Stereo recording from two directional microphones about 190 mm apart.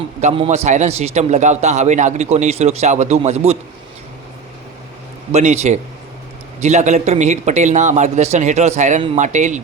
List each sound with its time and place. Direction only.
0.2 s a man's voice: 35° right (ahead or behind)
5.3 s a man's voice: 35° right (ahead or behind)